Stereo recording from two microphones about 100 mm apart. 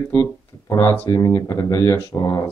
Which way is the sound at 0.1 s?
30° left (ahead or behind).